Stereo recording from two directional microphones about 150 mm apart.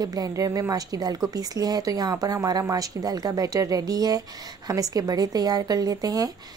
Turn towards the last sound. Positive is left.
turn(degrees=-25)  # may be behind; listen again after turning